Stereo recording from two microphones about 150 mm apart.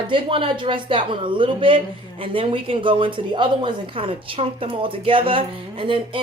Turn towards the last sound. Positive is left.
turn(degrees=-35)  # may be behind; listen again after turning